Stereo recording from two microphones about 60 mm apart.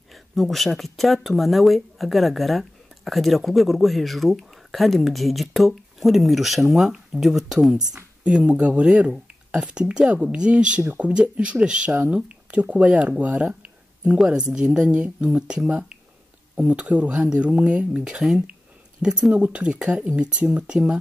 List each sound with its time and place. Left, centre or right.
0.1 s speech: centre; by 13.1 s right
14.3 s speech: centre